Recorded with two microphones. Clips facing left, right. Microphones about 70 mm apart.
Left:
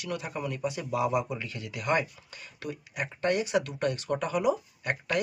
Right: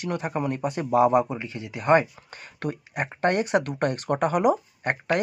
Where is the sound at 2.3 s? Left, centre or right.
Right.